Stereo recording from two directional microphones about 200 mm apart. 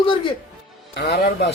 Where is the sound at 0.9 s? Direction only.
55° left (ahead or behind).